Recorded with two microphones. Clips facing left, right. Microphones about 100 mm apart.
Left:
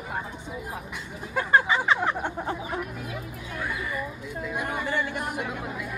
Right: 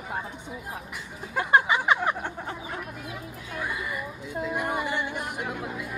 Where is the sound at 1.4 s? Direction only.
15° right (ahead or behind).